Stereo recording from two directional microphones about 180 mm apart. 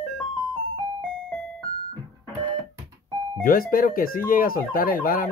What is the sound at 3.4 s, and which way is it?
Speech, 50° left (ahead or behind).